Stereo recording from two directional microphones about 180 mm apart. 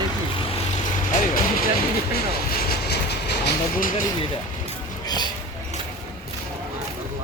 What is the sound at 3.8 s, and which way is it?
Speech, 50° left (ahead or behind).